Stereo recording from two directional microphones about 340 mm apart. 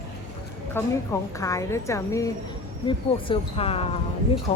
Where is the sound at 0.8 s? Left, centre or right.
Centre.